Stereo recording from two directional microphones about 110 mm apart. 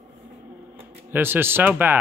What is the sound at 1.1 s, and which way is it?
Speech, 20° right (ahead or behind).